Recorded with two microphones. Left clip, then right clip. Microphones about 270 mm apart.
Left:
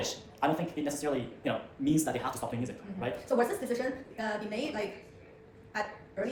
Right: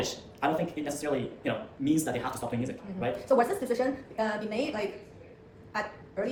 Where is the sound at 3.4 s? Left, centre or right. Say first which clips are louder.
Right 3 dB; centre.